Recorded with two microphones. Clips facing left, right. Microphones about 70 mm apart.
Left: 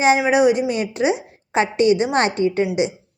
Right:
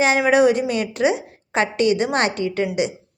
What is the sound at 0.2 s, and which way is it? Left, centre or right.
A woman's voice, centre.